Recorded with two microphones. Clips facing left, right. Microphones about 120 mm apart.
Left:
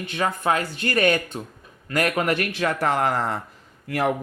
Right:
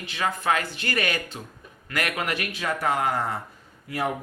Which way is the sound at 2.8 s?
85° left.